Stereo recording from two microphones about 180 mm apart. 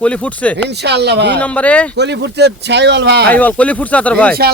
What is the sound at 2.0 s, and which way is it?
Speech, 70° right (ahead or behind).